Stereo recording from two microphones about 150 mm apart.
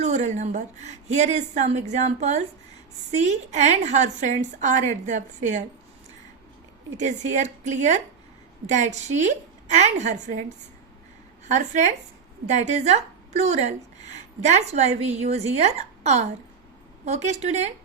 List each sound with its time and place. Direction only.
0.0 s a woman's voice: 50° right (ahead or behind)
6.9 s a woman's voice: 50° right (ahead or behind)
11.4 s a woman's voice: 55° right (ahead or behind)